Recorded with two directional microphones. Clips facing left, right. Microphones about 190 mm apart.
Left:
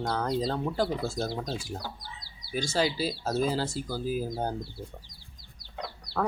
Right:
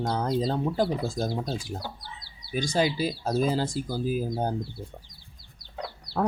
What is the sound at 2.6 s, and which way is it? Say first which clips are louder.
Speech: right 2 dB; 20° right (ahead or behind).